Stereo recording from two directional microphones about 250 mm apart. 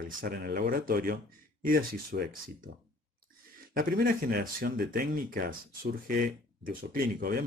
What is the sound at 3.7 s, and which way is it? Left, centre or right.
Speech, right.